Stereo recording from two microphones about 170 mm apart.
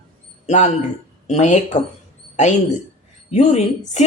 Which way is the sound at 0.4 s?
45° left (ahead or behind).